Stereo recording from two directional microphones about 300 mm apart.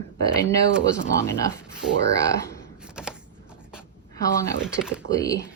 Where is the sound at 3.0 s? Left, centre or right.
Centre.